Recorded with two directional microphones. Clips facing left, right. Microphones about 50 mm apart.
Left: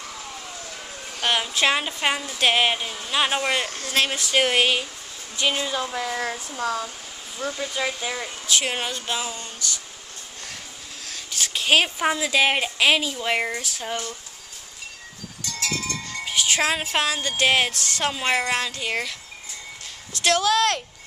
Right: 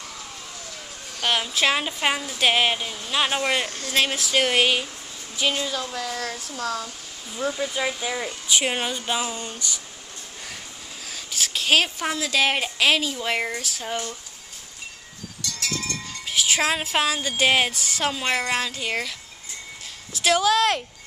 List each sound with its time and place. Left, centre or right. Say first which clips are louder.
1.2 s a woman's voice: even; centre
5.5 s speech: left 1 dB; centre
7.3 s a woman's voice: right 2 dB; centre
8.5 s speech: right 1 dB; centre
11.1 s a woman's voice: even; centre
16.1 s music: even; centre
18.1 s a woman's voice: left 3 dB; centre